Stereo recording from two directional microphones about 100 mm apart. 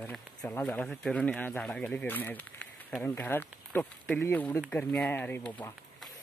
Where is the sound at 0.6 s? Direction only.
15° left (ahead or behind).